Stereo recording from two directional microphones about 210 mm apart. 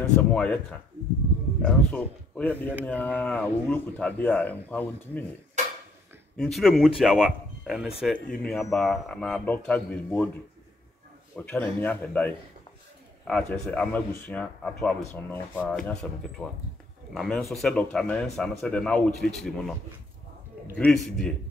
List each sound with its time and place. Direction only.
0.3 s speech: 5° left (ahead or behind)
6.3 s speech: centre (ahead or behind)
11.3 s speech: 5° left (ahead or behind)
13.3 s speech: 5° left (ahead or behind)
20.7 s speech: 5° left (ahead or behind)